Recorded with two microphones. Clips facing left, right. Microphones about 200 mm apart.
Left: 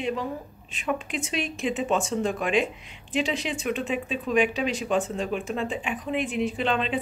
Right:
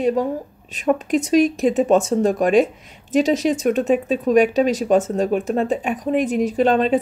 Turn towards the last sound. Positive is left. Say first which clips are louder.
# right 10 dB
turn(degrees=-40)  # may be behind; listen again after turning